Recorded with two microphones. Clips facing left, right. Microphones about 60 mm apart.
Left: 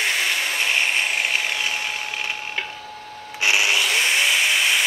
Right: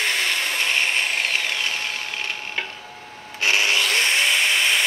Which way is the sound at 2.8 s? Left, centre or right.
Right.